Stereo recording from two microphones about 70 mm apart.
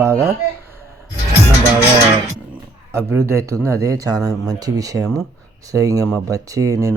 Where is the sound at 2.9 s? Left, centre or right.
Right.